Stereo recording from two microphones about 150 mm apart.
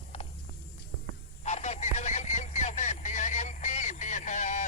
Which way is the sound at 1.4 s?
50° left (ahead or behind).